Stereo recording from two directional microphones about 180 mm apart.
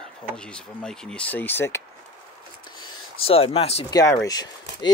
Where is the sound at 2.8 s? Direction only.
30° left (ahead or behind).